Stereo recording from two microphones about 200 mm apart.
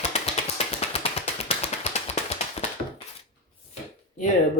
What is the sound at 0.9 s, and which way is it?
Tap, 30° left (ahead or behind).